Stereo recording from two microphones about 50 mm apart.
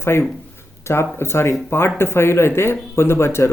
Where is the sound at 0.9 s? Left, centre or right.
Left.